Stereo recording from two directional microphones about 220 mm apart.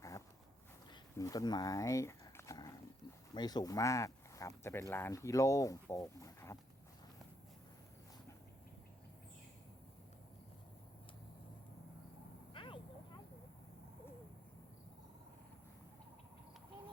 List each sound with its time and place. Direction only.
0.9 s dog: 15° left (ahead or behind)
3.3 s speech: 20° left (ahead or behind)
12.5 s a sound: 25° left (ahead or behind)